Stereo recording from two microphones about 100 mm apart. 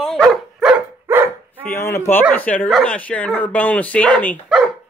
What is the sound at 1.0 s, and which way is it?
Dog, 25° right (ahead or behind).